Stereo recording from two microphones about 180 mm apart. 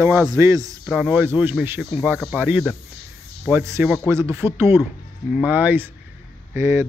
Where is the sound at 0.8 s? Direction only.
5° right (ahead or behind).